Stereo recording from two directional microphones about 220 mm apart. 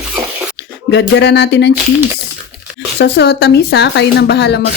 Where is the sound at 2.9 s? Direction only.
50° left (ahead or behind).